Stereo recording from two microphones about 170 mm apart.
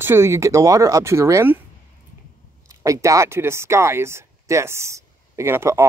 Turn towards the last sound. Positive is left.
turn(degrees=-15)  # may be behind; listen again after turning